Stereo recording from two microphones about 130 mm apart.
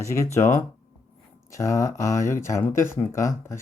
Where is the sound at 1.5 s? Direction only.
25° left (ahead or behind).